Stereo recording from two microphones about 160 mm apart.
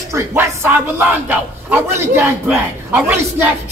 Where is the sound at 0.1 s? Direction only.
15° right (ahead or behind).